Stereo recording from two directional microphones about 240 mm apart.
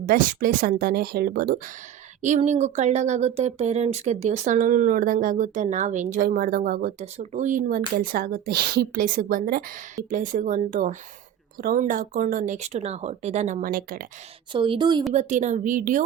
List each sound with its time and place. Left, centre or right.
0.0 s speech: right
14.5 s a woman's voice: right
15.1 s speech: right